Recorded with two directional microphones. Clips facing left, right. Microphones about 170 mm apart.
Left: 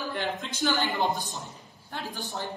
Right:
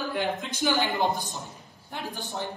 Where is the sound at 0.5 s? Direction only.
20° right (ahead or behind).